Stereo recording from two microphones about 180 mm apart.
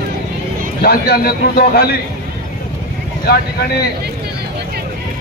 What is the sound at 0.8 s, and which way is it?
A man's voice, 60° left (ahead or behind).